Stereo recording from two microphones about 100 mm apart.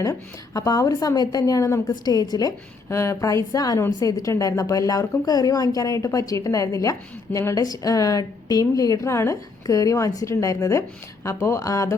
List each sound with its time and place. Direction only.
0.0 s a woman's voice: 35° left (ahead or behind)
2.9 s a woman's voice: 30° left (ahead or behind)